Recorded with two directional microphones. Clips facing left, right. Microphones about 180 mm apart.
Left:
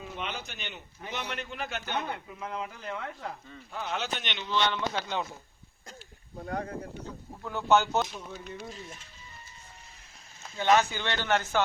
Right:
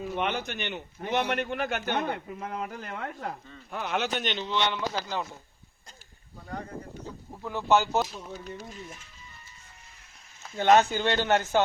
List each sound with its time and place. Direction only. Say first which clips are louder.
0.1 s a man's voice: right 8 dB; 60° right (ahead or behind); by 4.4 s 40° right (ahead or behind)
4.4 s speech: left 3 dB; 15° right (ahead or behind)
4.9 s speech: even; centre (ahead or behind)
7.4 s speech: right 1 dB; 5° right (ahead or behind)
8.3 s speech: right 2 dB; 40° right (ahead or behind)
10.6 s speech: right 4 dB; 50° right (ahead or behind)
11.2 s speech: right 1 dB; 15° right (ahead or behind)